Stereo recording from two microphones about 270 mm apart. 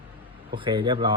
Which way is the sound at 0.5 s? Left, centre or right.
Centre.